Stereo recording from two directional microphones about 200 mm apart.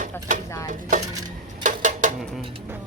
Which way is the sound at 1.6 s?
40° right (ahead or behind).